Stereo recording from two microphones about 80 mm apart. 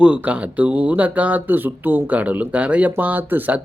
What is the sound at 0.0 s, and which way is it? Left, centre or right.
A man's voice, centre.